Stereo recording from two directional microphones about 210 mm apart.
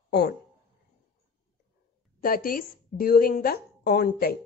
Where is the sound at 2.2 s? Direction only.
45° left (ahead or behind).